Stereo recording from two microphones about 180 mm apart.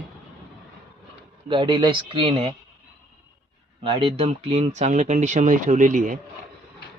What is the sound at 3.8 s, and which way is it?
Speech, 30° right (ahead or behind).